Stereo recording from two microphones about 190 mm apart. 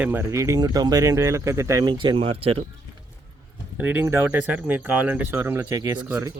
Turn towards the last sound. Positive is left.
turn(degrees=-15)  # may be behind; listen again after turning